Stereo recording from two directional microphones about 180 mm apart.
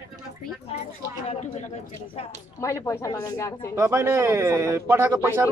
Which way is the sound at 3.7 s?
15° right (ahead or behind).